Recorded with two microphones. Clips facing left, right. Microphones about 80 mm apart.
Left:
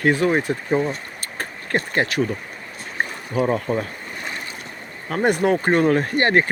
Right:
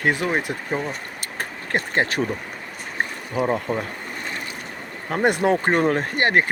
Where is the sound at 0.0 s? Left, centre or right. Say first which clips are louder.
Left 4 dB; centre.